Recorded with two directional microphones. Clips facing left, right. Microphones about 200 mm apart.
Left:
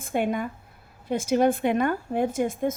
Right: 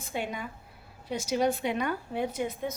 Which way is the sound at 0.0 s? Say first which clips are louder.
Left 8 dB; 50° left (ahead or behind).